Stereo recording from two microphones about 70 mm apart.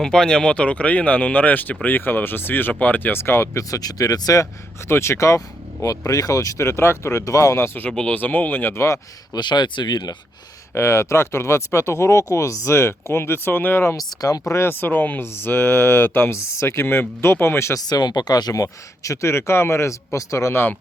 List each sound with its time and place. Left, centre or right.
0.0 s speech: centre; by 4.4 s left
4.9 s speech: left
7.9 s speech: centre
8.7 s speech: left
9.3 s speech: left
10.8 s speech: left
13.9 s speech: left
17.8 s speech: left